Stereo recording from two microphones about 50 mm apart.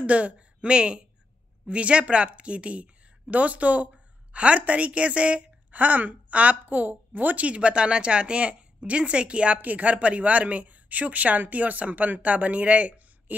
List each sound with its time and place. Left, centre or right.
0.0 s a woman's voice: right